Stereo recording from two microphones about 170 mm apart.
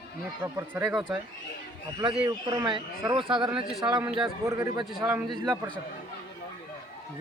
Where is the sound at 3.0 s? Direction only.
30° right (ahead or behind).